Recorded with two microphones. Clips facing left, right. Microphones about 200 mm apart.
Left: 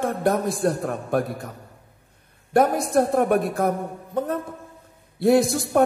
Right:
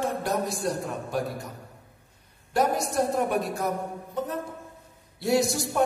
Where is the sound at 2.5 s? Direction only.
55° left (ahead or behind).